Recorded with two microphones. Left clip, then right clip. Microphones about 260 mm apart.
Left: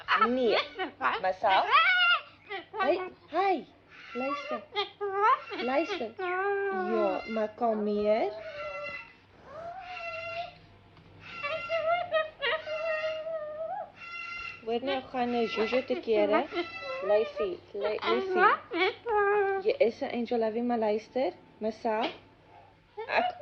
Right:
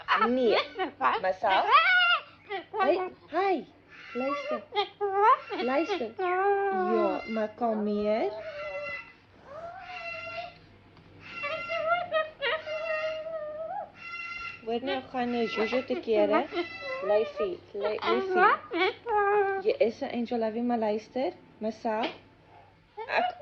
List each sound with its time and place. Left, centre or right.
0.0 s speech: centre
7.6 s speech: centre
7.9 s speech: centre
9.8 s a sound: centre
14.0 s goat: centre
14.8 s speech: centre
23.0 s hiccup: centre